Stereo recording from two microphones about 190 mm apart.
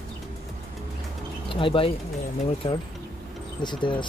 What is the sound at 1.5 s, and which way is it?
Speech, 30° left (ahead or behind).